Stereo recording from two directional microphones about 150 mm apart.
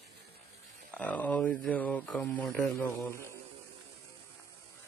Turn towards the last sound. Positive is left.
turn(degrees=20)  # may be behind; listen again after turning